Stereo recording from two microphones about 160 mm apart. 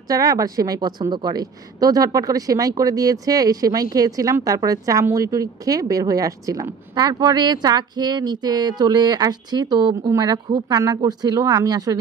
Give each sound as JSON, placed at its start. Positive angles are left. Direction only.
{"t": 0.1, "sound": "speech", "side_deg": -20}